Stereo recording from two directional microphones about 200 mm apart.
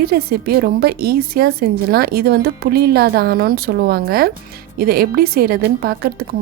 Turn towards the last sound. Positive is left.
turn(degrees=-50)  # may be behind; listen again after turning